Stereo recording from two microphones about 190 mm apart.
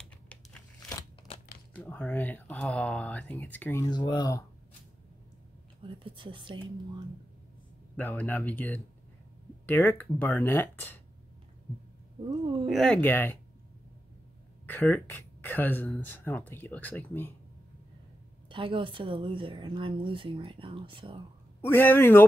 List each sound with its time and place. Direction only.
0.0 s crumpling: 5° left (ahead or behind)
1.8 s speech: 5° left (ahead or behind)
5.9 s a woman's voice: 25° right (ahead or behind)
7.9 s speech: 10° left (ahead or behind)
12.6 s speech: centre (ahead or behind)
14.7 s speech: 10° left (ahead or behind)
18.5 s a woman's voice: 25° right (ahead or behind)
21.5 s speech: 10° left (ahead or behind)